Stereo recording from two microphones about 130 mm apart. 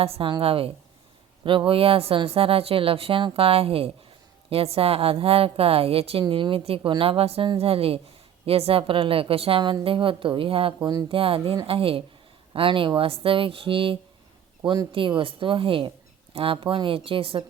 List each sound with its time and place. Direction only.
0.0 s a woman's voice: 45° right (ahead or behind)